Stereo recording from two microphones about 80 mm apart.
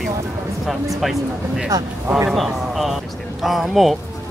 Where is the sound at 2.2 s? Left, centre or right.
Centre.